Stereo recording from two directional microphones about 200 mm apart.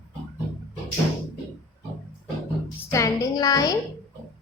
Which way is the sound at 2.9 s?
15° left (ahead or behind).